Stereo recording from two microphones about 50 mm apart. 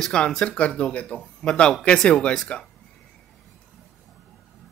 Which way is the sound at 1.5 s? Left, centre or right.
Centre.